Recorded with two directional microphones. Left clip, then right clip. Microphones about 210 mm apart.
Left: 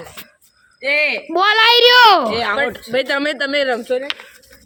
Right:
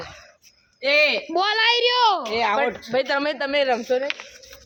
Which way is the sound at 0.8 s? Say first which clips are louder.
Left 2 dB; 5° left (ahead or behind).